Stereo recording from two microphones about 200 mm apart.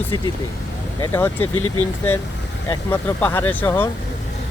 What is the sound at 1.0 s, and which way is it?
Speech, 10° left (ahead or behind).